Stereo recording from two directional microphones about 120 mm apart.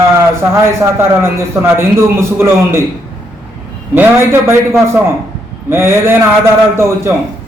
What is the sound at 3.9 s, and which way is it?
A man's voice, 20° right (ahead or behind).